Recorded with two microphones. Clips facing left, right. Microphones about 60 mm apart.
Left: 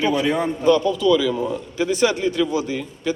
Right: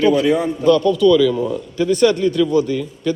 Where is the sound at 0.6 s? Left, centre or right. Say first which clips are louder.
Right 4 dB; centre.